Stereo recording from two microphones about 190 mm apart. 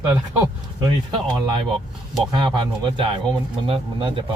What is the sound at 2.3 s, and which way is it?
Speech, 25° right (ahead or behind).